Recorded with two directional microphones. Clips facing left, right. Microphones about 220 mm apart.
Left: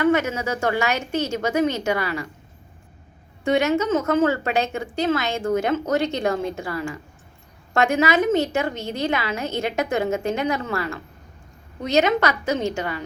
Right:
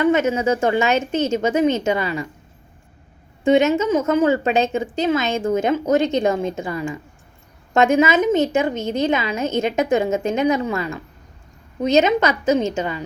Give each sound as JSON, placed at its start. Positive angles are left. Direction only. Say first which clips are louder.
{"t": 0.0, "sound": "a woman's voice", "louder": "right 3 dB", "side_deg": -20}
{"t": 3.4, "sound": "a woman's voice", "louder": "right 4 dB", "side_deg": -20}